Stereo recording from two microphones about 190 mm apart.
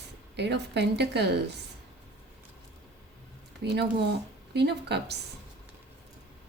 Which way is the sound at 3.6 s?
65° right (ahead or behind).